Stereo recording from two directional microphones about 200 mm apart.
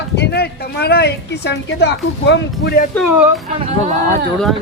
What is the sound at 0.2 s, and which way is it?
Speech, 55° left (ahead or behind).